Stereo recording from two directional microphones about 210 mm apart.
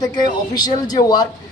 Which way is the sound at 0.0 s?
20° left (ahead or behind).